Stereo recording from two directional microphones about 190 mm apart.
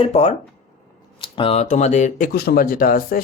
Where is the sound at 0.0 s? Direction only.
35° left (ahead or behind).